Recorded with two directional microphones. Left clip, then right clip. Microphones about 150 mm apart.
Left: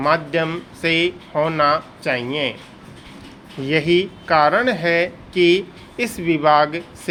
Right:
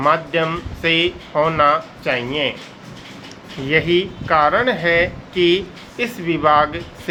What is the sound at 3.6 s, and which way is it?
Speech, 50° left (ahead or behind).